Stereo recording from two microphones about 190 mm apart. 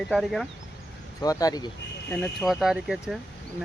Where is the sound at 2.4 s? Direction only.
Centre (ahead or behind).